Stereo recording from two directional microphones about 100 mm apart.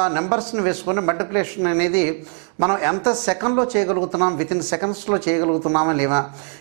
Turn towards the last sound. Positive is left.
turn(degrees=-15)  # may be behind; listen again after turning